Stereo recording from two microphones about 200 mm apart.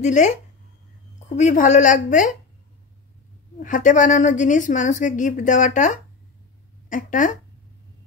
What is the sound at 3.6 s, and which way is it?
A woman's voice, 40° left (ahead or behind).